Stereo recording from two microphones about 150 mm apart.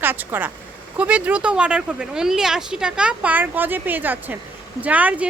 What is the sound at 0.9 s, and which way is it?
A woman's voice, 10° right (ahead or behind).